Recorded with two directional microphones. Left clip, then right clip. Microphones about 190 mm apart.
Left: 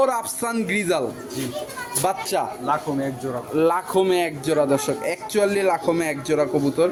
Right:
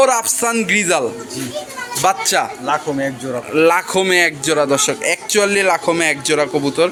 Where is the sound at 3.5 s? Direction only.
5° right (ahead or behind).